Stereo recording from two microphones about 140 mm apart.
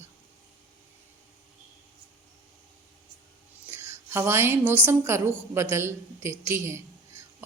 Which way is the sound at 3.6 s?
15° right (ahead or behind).